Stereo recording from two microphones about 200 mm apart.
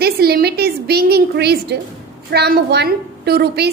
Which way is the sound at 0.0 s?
50° right (ahead or behind).